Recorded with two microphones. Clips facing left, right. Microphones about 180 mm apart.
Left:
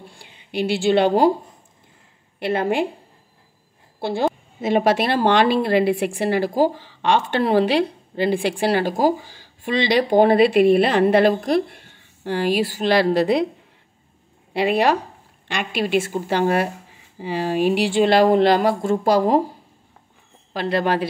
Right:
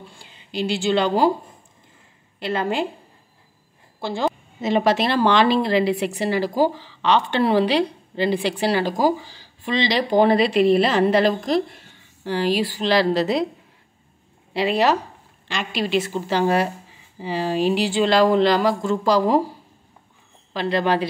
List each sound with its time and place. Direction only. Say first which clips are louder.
0.2 s speech: left 2 dB; 60° left (ahead or behind)
2.4 s a woman's voice: left 3 dB; 60° left (ahead or behind)
4.6 s speech: left 1 dB; 50° left (ahead or behind)
14.5 s speech: left 1 dB; 55° left (ahead or behind)
20.7 s speech: even; 45° left (ahead or behind)